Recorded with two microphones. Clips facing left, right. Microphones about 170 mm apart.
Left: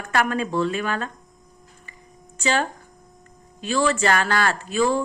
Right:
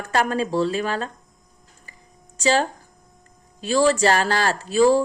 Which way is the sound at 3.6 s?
40° right (ahead or behind).